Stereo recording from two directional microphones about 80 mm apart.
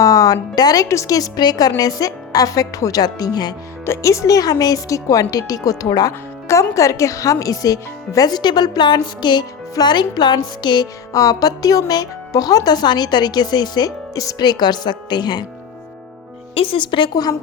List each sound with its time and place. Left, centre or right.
0.0 s speech: left
0.9 s speech: left
3.8 s speech: left
11.1 s speech: left
14.4 s speech: left
16.7 s a woman's voice: left